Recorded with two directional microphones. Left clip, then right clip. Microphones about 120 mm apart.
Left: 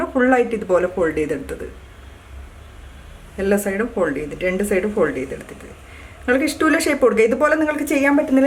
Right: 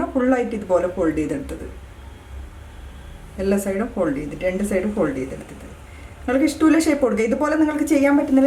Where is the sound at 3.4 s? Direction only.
35° left (ahead or behind).